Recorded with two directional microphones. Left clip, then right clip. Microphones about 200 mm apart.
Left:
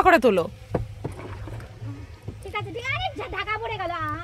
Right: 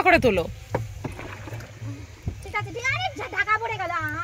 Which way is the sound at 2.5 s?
5° left (ahead or behind).